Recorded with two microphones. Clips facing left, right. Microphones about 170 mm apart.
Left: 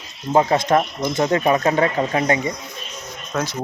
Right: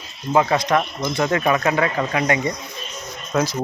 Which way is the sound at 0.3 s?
30° left (ahead or behind).